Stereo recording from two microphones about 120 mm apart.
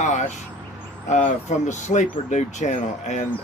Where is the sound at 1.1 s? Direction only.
75° left (ahead or behind).